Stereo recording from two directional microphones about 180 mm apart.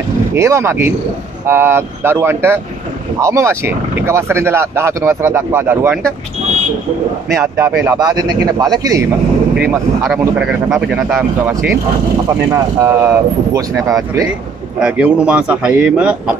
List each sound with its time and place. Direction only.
0.3 s speech: 15° right (ahead or behind)
7.3 s speech: 15° right (ahead or behind)
9.6 s speech: 10° right (ahead or behind)
12.5 s speech: 15° right (ahead or behind)
14.8 s speech: 5° right (ahead or behind)